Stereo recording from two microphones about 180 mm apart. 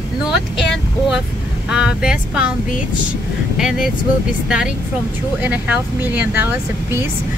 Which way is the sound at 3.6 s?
5° right (ahead or behind).